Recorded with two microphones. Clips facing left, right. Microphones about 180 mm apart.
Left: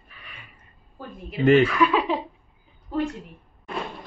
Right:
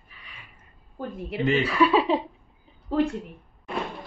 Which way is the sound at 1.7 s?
30° right (ahead or behind).